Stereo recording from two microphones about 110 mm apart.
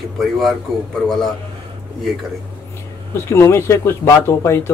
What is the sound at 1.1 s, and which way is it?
Speech, centre (ahead or behind).